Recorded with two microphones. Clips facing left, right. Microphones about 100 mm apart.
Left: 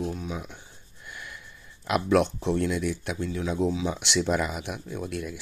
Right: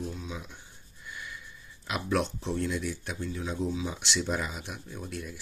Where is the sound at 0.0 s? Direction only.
60° left (ahead or behind).